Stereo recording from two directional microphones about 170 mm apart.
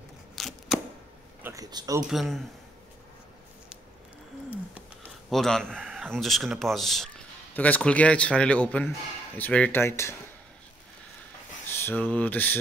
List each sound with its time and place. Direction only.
0.4 s a sound: centre (ahead or behind)
1.4 s speech: 20° right (ahead or behind)
2.0 s speech: centre (ahead or behind)
5.3 s speech: centre (ahead or behind)
11.8 s speech: 10° left (ahead or behind)